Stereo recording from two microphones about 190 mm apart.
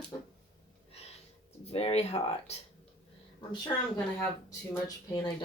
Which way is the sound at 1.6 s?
30° left (ahead or behind).